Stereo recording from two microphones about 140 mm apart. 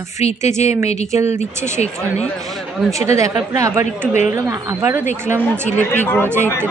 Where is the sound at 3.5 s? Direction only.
20° right (ahead or behind).